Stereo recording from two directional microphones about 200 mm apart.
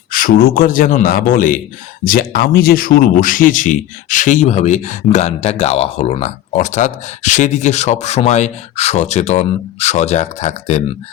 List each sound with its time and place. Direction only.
0.1 s speech: 45° left (ahead or behind)